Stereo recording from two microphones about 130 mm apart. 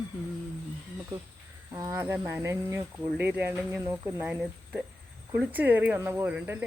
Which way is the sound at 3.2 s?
15° right (ahead or behind).